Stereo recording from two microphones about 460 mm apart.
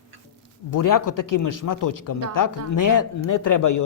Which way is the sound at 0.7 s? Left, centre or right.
Left.